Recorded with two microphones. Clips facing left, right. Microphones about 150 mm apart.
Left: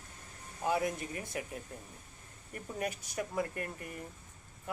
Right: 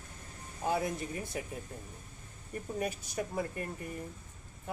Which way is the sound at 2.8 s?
30° right (ahead or behind).